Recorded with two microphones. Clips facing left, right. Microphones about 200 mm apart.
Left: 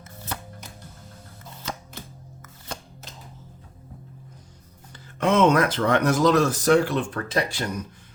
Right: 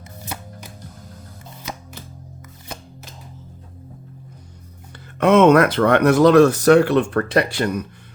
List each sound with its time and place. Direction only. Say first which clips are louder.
5.2 s speech: right 6 dB; 60° right (ahead or behind)